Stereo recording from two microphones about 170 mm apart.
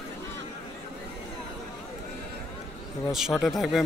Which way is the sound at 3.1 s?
Centre (ahead or behind).